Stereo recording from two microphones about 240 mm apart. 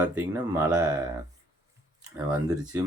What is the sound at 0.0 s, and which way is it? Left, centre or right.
Speech, centre.